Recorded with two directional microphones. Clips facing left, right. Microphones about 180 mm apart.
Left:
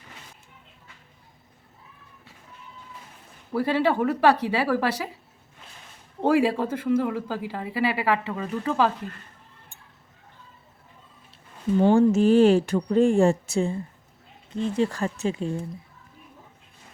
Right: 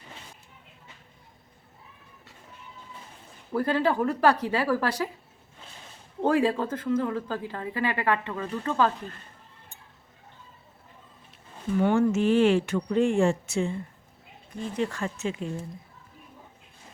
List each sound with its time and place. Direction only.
3.5 s a woman's voice: 10° left (ahead or behind)
6.2 s a woman's voice: 10° left (ahead or behind)
11.8 s speech: 30° left (ahead or behind)